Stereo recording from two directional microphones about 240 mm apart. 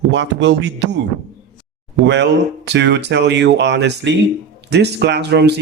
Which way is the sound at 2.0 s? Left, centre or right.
Right.